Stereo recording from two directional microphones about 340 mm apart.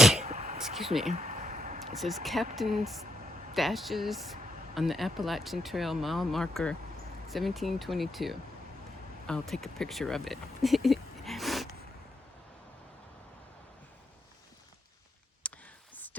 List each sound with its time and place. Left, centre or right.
0.2 s a sound: centre
2.0 s speech: centre
3.5 s speech: centre
15.4 s clicking: centre